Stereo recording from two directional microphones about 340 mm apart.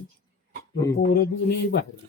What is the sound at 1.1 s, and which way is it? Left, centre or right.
Speech, left.